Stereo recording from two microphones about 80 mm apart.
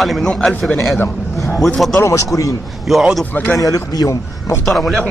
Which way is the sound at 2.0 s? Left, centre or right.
Left.